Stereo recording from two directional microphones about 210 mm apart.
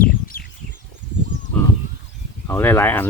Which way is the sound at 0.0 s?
45° left (ahead or behind).